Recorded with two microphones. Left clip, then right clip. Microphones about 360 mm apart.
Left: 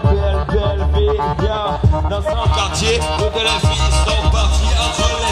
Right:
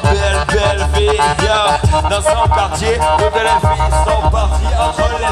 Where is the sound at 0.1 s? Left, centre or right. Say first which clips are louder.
Right 5 dB; right.